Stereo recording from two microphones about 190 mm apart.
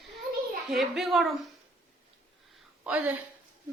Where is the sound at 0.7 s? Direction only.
Centre (ahead or behind).